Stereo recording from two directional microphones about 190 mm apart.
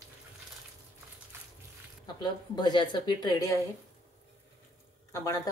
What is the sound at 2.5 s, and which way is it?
A woman's voice, 25° left (ahead or behind).